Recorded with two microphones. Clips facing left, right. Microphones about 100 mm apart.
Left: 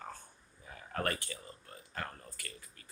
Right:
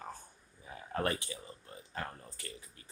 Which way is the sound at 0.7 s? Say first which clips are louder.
Right 2 dB; 25° right (ahead or behind).